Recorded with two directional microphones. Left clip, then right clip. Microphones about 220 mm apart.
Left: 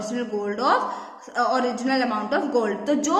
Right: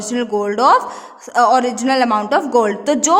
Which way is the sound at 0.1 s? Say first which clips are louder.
Right 12 dB; 50° right (ahead or behind).